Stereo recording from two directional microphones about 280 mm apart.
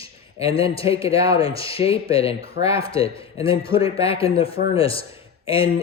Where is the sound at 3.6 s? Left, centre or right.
Centre.